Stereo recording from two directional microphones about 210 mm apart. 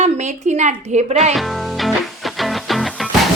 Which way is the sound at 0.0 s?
35° right (ahead or behind).